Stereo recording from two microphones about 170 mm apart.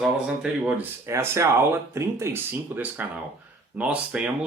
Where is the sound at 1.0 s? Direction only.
15° right (ahead or behind).